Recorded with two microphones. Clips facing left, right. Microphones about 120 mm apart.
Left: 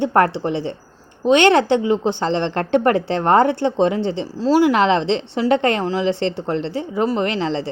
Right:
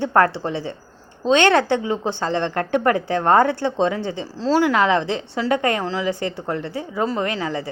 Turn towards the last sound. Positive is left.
turn(degrees=25)  # may be behind; listen again after turning